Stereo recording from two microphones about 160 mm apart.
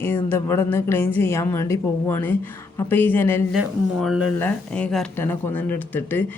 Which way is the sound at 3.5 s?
Centre (ahead or behind).